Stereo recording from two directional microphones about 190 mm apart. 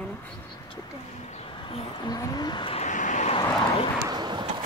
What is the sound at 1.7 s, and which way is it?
Speech, 25° left (ahead or behind).